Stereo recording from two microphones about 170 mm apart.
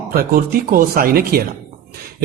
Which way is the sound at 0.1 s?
60° right (ahead or behind).